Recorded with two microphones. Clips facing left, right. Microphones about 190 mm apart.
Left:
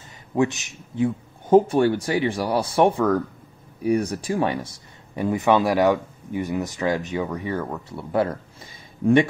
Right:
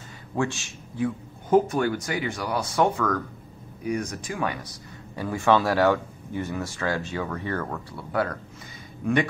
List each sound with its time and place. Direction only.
0.4 s speech: 20° left (ahead or behind)
7.9 s speech: 25° left (ahead or behind)